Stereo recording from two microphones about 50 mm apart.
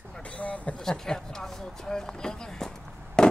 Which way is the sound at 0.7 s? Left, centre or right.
Centre.